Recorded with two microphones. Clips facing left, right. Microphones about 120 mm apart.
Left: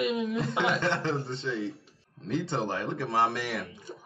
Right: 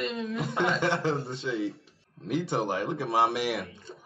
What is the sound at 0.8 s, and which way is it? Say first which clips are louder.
Speech: right 2 dB; 20° right (ahead or behind).